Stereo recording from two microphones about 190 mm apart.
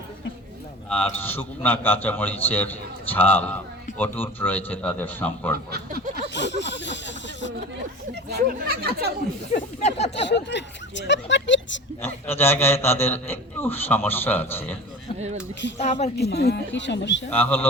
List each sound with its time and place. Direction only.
0.9 s a man's voice: 10° left (ahead or behind)
6.3 s a sound: 65° left (ahead or behind)
8.3 s speech: 50° right (ahead or behind)
9.8 s speech: 35° left (ahead or behind)
10.2 s speech: 70° left (ahead or behind)
12.0 s a man's voice: 10° left (ahead or behind)
16.1 s speech: 60° left (ahead or behind)
17.3 s a man's voice: 10° left (ahead or behind)